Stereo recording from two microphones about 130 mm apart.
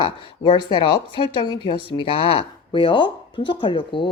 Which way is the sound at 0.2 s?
40° left (ahead or behind).